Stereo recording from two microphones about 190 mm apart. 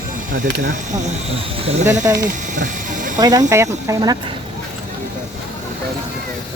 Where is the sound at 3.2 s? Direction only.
20° right (ahead or behind).